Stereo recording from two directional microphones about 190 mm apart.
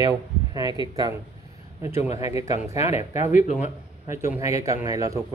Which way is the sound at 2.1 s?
15° right (ahead or behind).